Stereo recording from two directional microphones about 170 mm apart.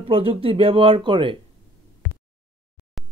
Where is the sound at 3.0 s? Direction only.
Centre (ahead or behind).